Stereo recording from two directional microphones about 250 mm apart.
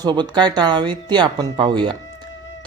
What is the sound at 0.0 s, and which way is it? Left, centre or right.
Speech, centre.